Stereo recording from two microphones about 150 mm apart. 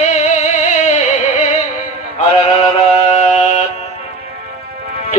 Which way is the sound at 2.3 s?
45° left (ahead or behind).